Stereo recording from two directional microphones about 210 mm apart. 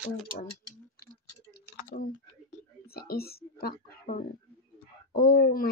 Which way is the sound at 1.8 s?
40° left (ahead or behind).